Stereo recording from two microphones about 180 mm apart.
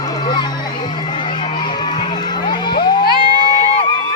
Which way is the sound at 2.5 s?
25° left (ahead or behind).